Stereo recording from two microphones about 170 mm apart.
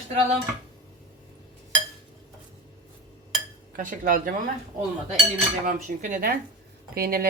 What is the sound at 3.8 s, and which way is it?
Speech, 50° right (ahead or behind).